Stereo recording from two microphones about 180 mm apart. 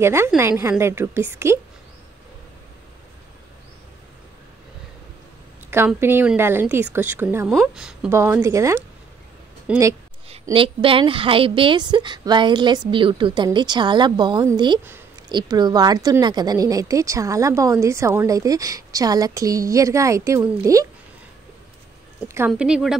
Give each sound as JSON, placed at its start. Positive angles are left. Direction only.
{"t": 0.0, "sound": "a woman's voice", "side_deg": -15}
{"t": 5.7, "sound": "a woman's voice", "side_deg": -15}
{"t": 10.5, "sound": "a woman's voice", "side_deg": -30}
{"t": 22.5, "sound": "speech", "side_deg": -5}